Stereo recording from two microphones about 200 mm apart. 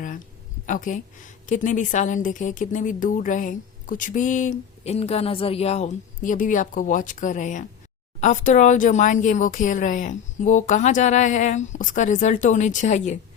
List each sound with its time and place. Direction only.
0.7 s a woman's voice: 40° left (ahead or behind)